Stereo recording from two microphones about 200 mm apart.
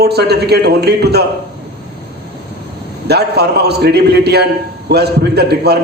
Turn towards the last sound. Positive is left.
turn(degrees=-55)  # may be behind; listen again after turning